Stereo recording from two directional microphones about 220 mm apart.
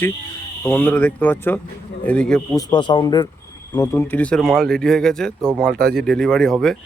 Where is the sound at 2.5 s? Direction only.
20° left (ahead or behind); by 6.7 s centre (ahead or behind).